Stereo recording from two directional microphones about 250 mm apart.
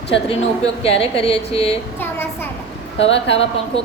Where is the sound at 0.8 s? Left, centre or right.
Left.